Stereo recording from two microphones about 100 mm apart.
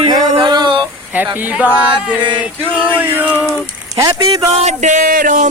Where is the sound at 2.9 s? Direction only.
15° right (ahead or behind).